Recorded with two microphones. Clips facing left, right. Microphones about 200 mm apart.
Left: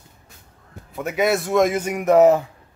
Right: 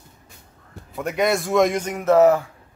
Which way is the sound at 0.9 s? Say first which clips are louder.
Left 1 dB; 5° left (ahead or behind).